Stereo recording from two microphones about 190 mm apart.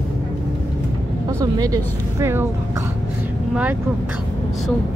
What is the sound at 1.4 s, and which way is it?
Speech, 20° right (ahead or behind).